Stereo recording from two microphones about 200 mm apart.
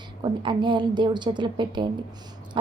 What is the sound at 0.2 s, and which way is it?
A woman's voice, 25° right (ahead or behind).